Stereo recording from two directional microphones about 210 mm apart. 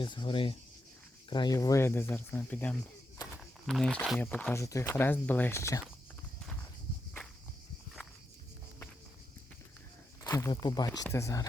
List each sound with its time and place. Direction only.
0.0 s speech: 25° left (ahead or behind)
10.2 s speech: 15° left (ahead or behind)